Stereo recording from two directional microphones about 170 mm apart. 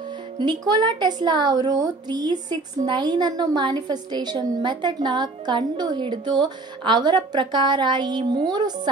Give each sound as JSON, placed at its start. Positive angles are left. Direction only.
{"t": 0.4, "sound": "a woman's voice", "side_deg": -25}